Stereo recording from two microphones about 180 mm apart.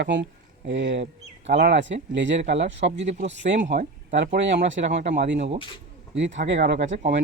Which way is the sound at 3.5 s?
90° right.